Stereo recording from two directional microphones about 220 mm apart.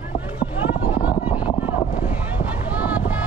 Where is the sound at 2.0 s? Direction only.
5° right (ahead or behind).